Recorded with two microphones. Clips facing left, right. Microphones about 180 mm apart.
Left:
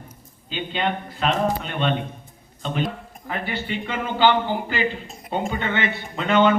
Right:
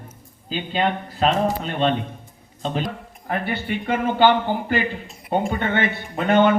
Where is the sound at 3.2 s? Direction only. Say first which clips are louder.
Right 3 dB; 55° right (ahead or behind).